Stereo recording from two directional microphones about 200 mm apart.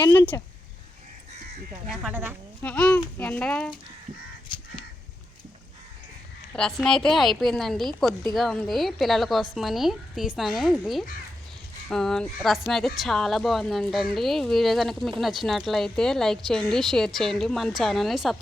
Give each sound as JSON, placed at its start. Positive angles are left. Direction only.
{"t": 0.1, "sound": "a child's voice", "side_deg": 10}
{"t": 1.9, "sound": "speech", "side_deg": -5}
{"t": 2.6, "sound": "a child's voice", "side_deg": 5}
{"t": 4.4, "sound": "crow", "side_deg": 25}
{"t": 6.5, "sound": "speech", "side_deg": 5}